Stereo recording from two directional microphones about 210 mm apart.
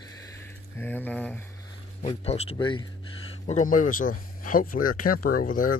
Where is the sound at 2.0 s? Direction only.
30° left (ahead or behind).